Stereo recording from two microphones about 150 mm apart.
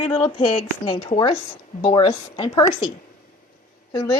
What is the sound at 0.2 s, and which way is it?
A woman's voice, 35° left (ahead or behind).